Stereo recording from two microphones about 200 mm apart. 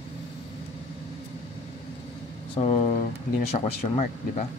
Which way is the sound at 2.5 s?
30° left (ahead or behind).